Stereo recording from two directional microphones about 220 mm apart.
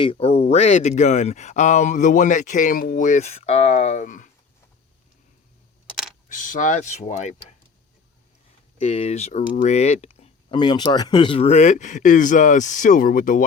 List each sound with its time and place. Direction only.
0.0 s speech: 25° left (ahead or behind)
6.2 s speech: 35° left (ahead or behind)
8.8 s speech: 30° left (ahead or behind)